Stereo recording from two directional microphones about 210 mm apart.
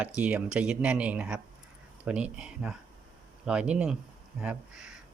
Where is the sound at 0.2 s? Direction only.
5° right (ahead or behind).